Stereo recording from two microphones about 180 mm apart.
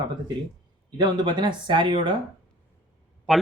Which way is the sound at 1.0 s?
25° right (ahead or behind).